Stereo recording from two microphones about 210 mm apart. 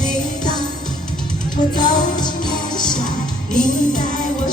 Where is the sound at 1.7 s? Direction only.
20° left (ahead or behind).